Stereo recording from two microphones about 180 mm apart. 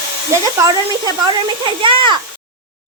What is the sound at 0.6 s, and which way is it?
Speech, 20° right (ahead or behind).